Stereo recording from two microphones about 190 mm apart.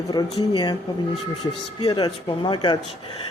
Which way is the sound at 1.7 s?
25° left (ahead or behind).